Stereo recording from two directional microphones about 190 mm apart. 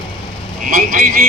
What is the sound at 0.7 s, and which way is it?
Speech, 50° right (ahead or behind).